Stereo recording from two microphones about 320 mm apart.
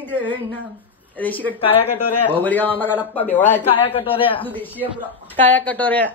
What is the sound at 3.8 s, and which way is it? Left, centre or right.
Speech, centre.